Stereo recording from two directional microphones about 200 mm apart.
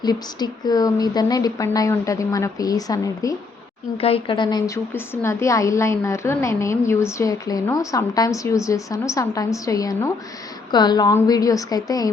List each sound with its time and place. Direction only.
0.0 s a woman's voice: 20° left (ahead or behind)
3.9 s a woman's voice: 30° left (ahead or behind)